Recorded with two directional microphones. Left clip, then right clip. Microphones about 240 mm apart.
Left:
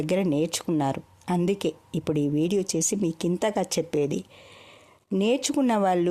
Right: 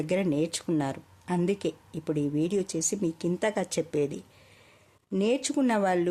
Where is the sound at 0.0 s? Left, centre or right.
Left.